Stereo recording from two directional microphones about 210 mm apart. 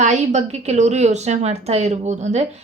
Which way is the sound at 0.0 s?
35° right (ahead or behind).